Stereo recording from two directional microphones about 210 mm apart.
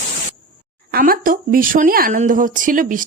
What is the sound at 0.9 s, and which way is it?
Speech, 40° right (ahead or behind).